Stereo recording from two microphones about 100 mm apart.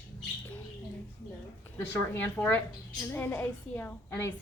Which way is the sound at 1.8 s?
25° left (ahead or behind).